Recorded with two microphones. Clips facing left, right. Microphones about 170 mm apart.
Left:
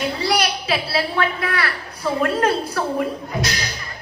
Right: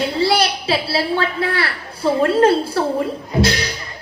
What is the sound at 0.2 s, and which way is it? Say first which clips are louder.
A woman's voice: right 4 dB; 30° right (ahead or behind).